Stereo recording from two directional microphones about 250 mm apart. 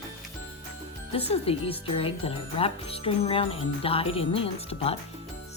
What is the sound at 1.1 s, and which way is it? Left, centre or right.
Speech, left.